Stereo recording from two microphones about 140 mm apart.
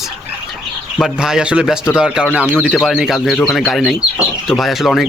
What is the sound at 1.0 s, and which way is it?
Speech, 5° right (ahead or behind).